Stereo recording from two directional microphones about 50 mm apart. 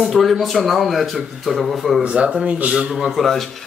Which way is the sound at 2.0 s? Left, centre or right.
Right.